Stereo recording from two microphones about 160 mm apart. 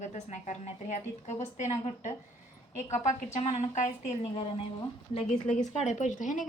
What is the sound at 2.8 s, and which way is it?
A woman's voice, 50° left (ahead or behind).